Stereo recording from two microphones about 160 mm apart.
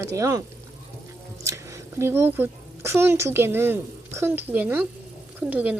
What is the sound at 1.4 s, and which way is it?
A woman's voice, 20° right (ahead or behind).